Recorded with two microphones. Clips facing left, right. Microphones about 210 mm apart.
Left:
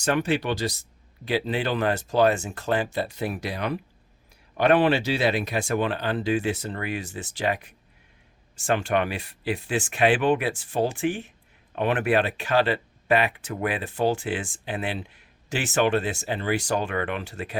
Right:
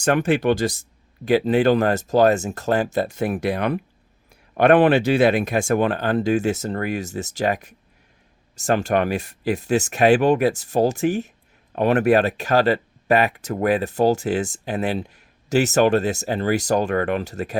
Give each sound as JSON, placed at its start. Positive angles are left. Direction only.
{"t": 0.0, "sound": "speech", "side_deg": -50}